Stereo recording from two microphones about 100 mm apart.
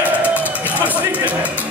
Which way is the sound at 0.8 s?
15° right (ahead or behind).